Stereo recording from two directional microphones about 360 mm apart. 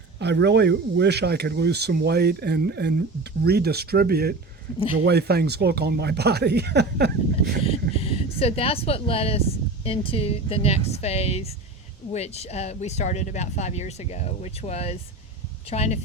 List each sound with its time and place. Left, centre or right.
0.2 s speech: right
7.6 s speech: centre